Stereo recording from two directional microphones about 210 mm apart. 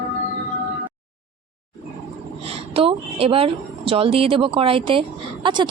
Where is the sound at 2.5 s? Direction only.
25° right (ahead or behind).